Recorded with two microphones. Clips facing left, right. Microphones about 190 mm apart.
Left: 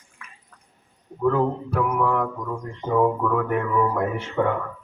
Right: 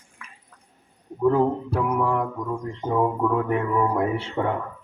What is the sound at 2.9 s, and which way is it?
Speech, 25° right (ahead or behind).